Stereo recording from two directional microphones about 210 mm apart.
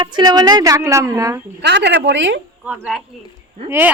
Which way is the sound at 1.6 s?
55° right (ahead or behind).